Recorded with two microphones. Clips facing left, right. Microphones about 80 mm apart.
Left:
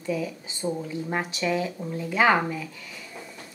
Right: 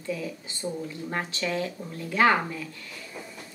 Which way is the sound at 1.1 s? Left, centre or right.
Centre.